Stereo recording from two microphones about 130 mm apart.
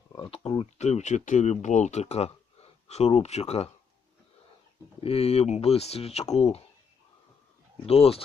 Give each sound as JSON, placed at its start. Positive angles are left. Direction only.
{"t": 0.2, "sound": "speech", "side_deg": 50}
{"t": 4.9, "sound": "speech", "side_deg": 50}
{"t": 7.9, "sound": "speech", "side_deg": 50}